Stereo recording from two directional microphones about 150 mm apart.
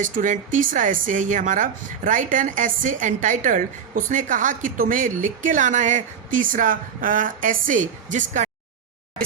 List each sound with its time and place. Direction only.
0.0 s speech: 60° right (ahead or behind)